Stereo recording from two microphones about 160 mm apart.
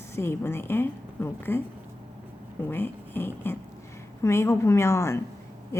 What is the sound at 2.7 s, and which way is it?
A woman's voice, 15° left (ahead or behind).